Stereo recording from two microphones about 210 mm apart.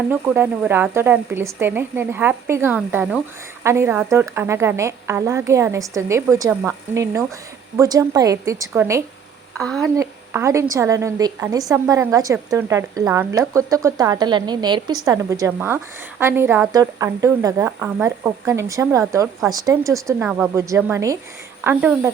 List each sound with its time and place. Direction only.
0.1 s a woman's voice: 10° right (ahead or behind)
9.6 s a woman's voice: centre (ahead or behind)
9.9 s a woman's voice: 15° right (ahead or behind)